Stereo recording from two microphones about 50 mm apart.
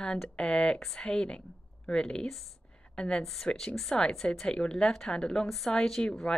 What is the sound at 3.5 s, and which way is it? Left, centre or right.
Speech, centre.